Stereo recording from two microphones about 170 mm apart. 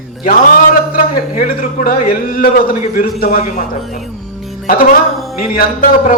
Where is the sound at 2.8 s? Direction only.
55° left (ahead or behind).